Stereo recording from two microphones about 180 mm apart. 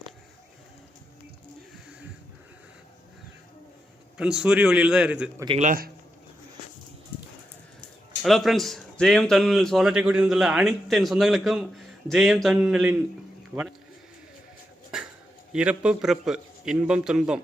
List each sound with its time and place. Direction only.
4.2 s a man's voice: 5° right (ahead or behind)
5.5 s speech: 50° right (ahead or behind)
8.2 s a man's voice: centre (ahead or behind)
13.5 s speech: 20° right (ahead or behind)
14.8 s a sound: 5° right (ahead or behind)
15.5 s a man's voice: 5° right (ahead or behind)